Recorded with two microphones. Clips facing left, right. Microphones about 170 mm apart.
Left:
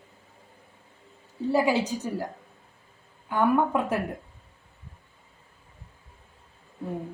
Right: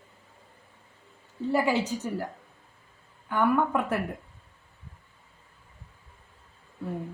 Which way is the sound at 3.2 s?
15° left (ahead or behind).